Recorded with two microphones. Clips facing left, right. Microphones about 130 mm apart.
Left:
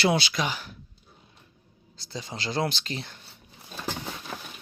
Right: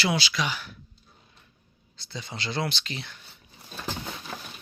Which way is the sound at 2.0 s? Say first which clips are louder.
Left 2 dB; 35° left (ahead or behind).